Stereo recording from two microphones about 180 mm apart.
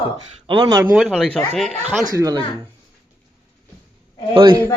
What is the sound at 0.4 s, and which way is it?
Speech, 25° right (ahead or behind).